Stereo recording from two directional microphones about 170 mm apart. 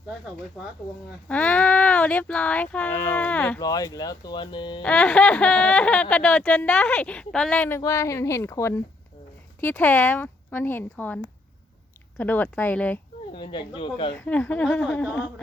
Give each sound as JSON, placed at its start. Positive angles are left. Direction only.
{"t": 1.3, "sound": "speech", "side_deg": 10}
{"t": 3.6, "sound": "speech", "side_deg": 20}
{"t": 4.8, "sound": "speech", "side_deg": 5}
{"t": 13.3, "sound": "speech", "side_deg": 30}
{"t": 14.2, "sound": "speech", "side_deg": 10}